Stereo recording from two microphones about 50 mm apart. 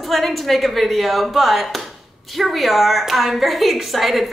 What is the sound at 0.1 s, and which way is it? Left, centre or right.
A woman's voice, centre.